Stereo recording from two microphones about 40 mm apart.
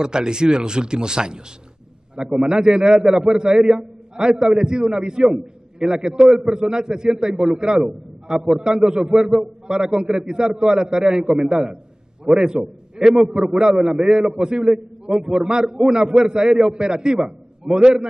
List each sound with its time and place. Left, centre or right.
0.0 s a man's voice: centre
6.2 s a man's voice: centre